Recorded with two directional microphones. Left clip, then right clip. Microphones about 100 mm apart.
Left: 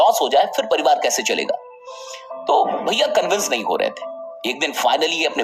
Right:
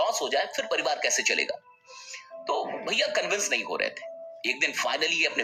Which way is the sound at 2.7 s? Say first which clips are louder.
Left 9 dB; 40° left (ahead or behind).